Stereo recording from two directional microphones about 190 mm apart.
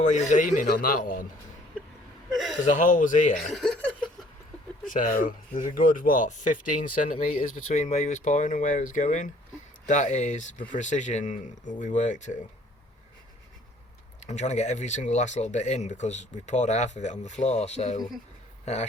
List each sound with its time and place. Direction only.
0.0 s speech: 40° left (ahead or behind)
2.3 s speech: centre (ahead or behind)
2.6 s speech: 40° left (ahead or behind)
3.3 s speech: centre (ahead or behind)
4.9 s speech: 45° left (ahead or behind)
14.2 s speech: 35° left (ahead or behind)